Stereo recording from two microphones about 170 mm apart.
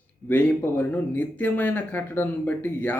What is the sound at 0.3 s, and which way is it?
Speech, 10° left (ahead or behind).